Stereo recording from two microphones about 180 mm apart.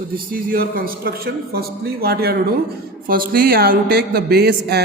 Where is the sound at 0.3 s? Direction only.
50° right (ahead or behind).